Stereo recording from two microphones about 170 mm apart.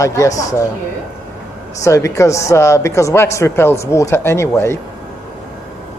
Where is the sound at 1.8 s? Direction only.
20° left (ahead or behind).